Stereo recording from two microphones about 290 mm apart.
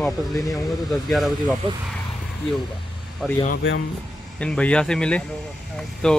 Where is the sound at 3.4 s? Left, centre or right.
Left.